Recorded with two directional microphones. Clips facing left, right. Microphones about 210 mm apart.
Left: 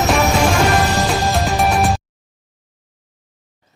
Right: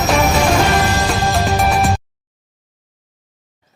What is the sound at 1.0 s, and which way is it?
Music, centre (ahead or behind).